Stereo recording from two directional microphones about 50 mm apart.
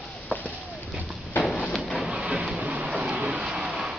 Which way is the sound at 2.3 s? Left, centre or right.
Right.